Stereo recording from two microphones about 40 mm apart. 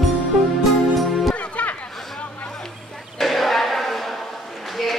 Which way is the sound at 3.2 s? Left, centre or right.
Centre.